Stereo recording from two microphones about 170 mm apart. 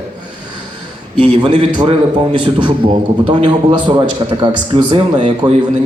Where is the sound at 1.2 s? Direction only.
30° right (ahead or behind).